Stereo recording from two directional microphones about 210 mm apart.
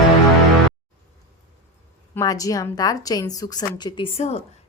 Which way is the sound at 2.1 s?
15° left (ahead or behind).